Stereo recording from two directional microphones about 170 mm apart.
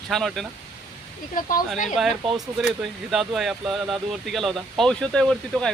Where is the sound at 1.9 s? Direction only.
Centre (ahead or behind).